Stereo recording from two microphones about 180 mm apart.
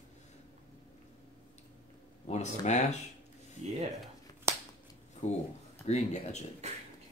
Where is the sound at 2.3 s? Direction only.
40° left (ahead or behind).